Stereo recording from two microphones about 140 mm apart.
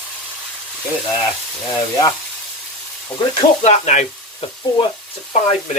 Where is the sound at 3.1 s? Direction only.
5° left (ahead or behind).